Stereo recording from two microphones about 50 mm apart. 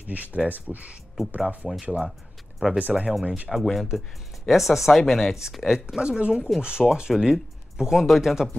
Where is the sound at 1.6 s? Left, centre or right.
Centre.